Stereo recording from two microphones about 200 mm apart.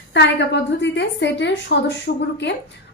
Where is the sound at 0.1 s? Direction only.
60° left (ahead or behind).